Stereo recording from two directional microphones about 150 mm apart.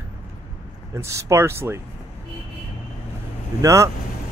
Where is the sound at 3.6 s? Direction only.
20° right (ahead or behind).